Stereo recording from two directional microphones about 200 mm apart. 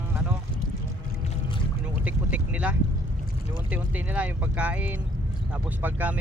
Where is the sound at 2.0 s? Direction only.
5° right (ahead or behind).